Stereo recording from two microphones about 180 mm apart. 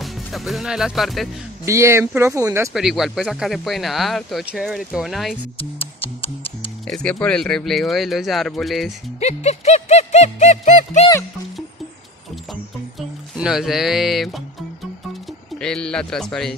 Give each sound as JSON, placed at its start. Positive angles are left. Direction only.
{"t": 0.0, "sound": "speech", "side_deg": 0}
{"t": 1.7, "sound": "speech", "side_deg": -15}
{"t": 2.7, "sound": "speech", "side_deg": 0}
{"t": 5.6, "sound": "speech", "side_deg": 30}
{"t": 6.9, "sound": "speech", "side_deg": 5}
{"t": 9.2, "sound": "music", "side_deg": 35}
{"t": 13.4, "sound": "speech", "side_deg": 0}
{"t": 15.6, "sound": "speech", "side_deg": 5}